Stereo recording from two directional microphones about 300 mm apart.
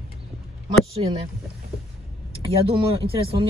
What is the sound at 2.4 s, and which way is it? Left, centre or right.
Speech, centre.